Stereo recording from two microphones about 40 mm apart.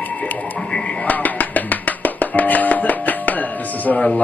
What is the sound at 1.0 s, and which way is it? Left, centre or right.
Music, left.